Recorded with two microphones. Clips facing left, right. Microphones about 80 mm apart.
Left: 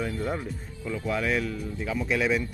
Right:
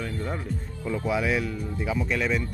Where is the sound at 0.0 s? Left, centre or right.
Centre.